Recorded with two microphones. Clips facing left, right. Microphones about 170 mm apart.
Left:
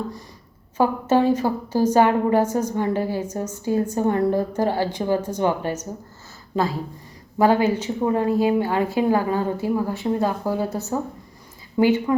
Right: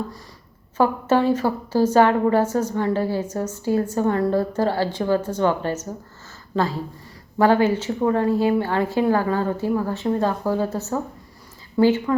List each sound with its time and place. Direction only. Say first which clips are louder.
0.8 s a woman's voice: even; 15° left (ahead or behind)